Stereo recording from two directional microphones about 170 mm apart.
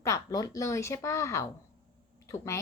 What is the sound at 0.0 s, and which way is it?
A woman's voice, 20° left (ahead or behind).